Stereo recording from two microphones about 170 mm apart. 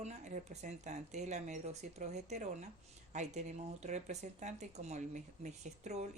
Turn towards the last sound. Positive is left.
turn(degrees=-45)  # may be behind; listen again after turning